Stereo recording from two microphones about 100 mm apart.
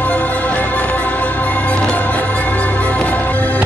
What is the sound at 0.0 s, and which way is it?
Music, 15° left (ahead or behind).